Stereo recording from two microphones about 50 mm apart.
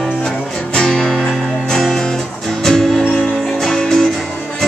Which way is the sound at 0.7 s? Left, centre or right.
Centre.